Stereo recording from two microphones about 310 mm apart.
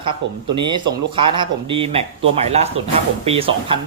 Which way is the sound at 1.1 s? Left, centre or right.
Centre.